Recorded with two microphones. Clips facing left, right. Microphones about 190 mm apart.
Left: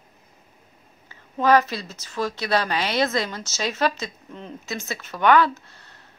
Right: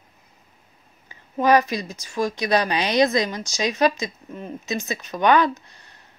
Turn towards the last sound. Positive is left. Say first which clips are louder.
# right 4 dB
turn(degrees=-15)  # may be behind; listen again after turning